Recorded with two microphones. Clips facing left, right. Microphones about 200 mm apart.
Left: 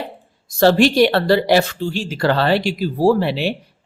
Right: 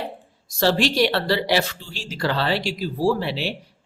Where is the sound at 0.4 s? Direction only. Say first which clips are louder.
Left 7 dB; 55° left (ahead or behind).